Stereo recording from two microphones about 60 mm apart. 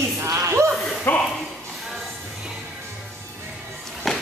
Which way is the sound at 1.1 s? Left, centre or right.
Left.